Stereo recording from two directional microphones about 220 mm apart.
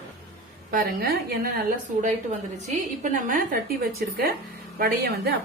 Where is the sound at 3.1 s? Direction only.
40° right (ahead or behind).